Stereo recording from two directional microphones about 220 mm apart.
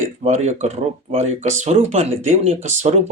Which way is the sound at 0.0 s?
30° right (ahead or behind).